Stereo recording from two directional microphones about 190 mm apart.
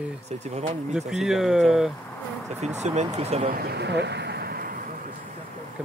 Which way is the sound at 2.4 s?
35° right (ahead or behind).